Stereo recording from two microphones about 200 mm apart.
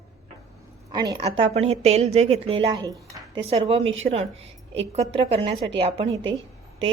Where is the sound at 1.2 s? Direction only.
30° right (ahead or behind).